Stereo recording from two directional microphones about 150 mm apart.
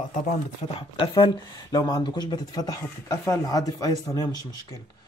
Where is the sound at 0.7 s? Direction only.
30° left (ahead or behind).